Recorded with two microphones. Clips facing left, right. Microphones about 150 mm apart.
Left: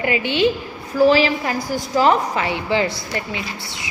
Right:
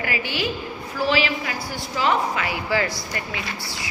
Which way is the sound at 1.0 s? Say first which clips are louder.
Left 6 dB; 40° left (ahead or behind).